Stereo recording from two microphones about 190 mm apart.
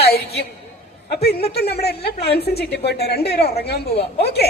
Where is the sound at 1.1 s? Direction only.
55° left (ahead or behind).